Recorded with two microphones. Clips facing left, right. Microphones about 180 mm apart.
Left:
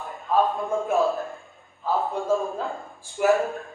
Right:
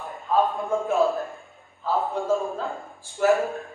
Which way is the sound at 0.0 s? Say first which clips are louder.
Even; centre (ahead or behind).